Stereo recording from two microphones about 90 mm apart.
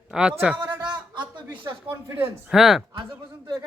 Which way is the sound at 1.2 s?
55° right (ahead or behind).